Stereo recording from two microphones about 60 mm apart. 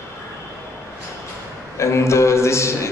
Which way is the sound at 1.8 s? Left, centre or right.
Left.